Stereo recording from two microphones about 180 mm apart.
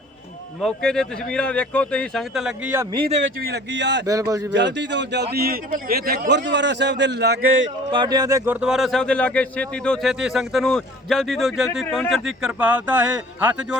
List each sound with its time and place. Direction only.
0.6 s speech: 5° left (ahead or behind)
3.4 s a man's voice: 70° right (ahead or behind)
4.0 s speech: 20° right (ahead or behind)
4.5 s a man's voice: 80° right
7.9 s speech: 25° right (ahead or behind)
8.6 s speech: centre (ahead or behind)